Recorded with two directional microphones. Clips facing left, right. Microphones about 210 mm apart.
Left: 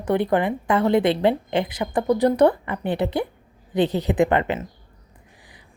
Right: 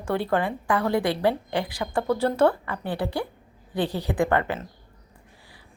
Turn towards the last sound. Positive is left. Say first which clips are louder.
# left 4 dB
turn(degrees=20)  # may be behind; listen again after turning